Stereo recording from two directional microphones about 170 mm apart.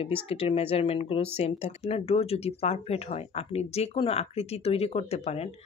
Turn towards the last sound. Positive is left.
turn(degrees=35)  # may be behind; listen again after turning